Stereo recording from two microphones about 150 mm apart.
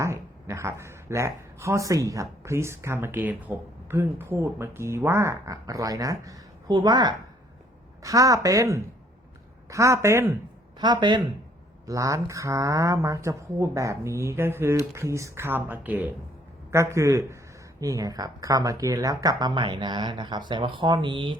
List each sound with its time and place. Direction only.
0.0 s speech: 20° right (ahead or behind)
10.8 s speech: 30° right (ahead or behind)